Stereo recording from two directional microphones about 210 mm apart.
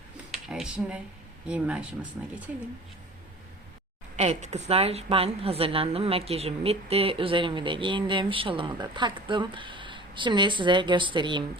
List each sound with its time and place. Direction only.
0.3 s a sound: 5° right (ahead or behind)
1.5 s speech: 5° right (ahead or behind)
4.2 s a woman's voice: 30° right (ahead or behind)